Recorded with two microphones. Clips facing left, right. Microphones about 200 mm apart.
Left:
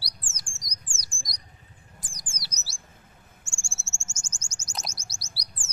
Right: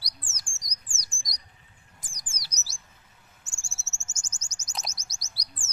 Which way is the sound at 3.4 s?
25° left (ahead or behind).